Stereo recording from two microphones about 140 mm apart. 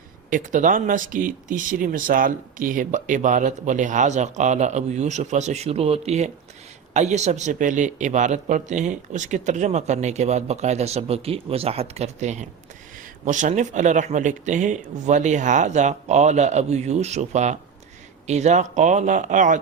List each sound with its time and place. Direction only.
0.3 s speech: 65° right (ahead or behind)